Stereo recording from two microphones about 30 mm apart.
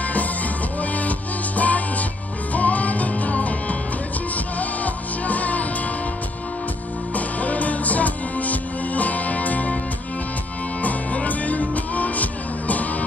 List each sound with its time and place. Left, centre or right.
0.7 s music: left
7.2 s music: left
11.2 s music: left